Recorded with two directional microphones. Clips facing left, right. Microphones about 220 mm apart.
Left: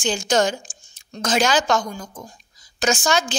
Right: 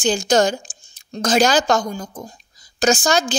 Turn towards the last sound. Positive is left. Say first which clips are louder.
# right 3 dB
turn(degrees=-40)  # may be behind; listen again after turning